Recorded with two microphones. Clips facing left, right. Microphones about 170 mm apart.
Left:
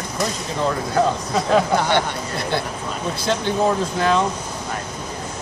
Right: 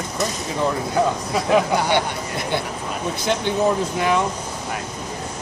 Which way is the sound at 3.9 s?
15° right (ahead or behind).